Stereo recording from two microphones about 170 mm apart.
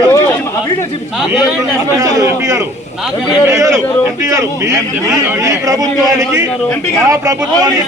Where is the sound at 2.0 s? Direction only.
20° right (ahead or behind).